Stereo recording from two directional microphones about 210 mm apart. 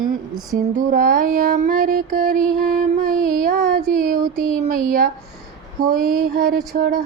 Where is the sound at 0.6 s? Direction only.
40° right (ahead or behind).